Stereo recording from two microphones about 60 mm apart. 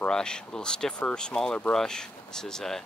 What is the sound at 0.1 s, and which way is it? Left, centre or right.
Speech, centre.